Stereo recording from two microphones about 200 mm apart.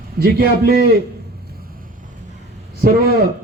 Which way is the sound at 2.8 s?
50° right (ahead or behind).